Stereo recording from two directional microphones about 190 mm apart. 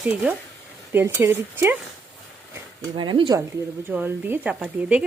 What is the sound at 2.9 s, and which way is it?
Speech, 25° right (ahead or behind).